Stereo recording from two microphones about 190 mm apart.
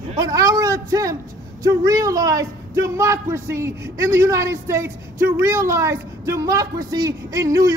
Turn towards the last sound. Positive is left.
turn(degrees=-15)  # may be behind; listen again after turning